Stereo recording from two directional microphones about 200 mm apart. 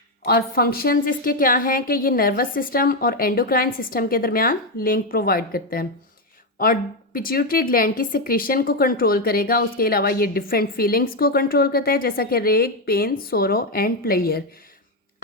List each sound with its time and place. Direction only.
0.3 s a woman's voice: 50° left (ahead or behind)